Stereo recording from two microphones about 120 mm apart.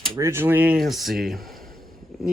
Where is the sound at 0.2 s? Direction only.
20° right (ahead or behind).